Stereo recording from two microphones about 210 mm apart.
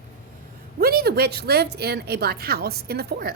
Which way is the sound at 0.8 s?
45° right (ahead or behind).